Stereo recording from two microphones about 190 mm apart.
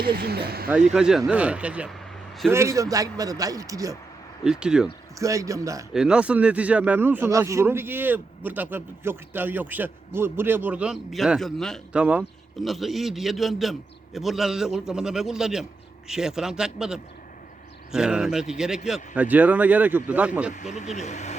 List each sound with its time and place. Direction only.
0.0 s speech: 55° right (ahead or behind)
0.9 s a man's voice: 5° right (ahead or behind)
4.4 s a man's voice: 5° right (ahead or behind)
5.2 s speech: 15° right (ahead or behind)
5.9 s a man's voice: 5° right (ahead or behind)
20.7 s speech: 35° left (ahead or behind)